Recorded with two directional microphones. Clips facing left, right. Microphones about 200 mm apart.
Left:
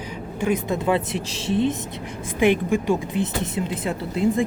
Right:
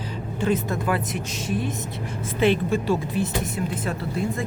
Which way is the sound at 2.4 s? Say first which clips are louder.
Left 2 dB; 15° left (ahead or behind).